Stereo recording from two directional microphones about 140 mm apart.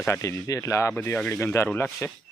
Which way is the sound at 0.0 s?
20° left (ahead or behind).